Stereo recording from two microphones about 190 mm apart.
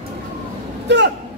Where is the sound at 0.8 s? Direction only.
65° right (ahead or behind).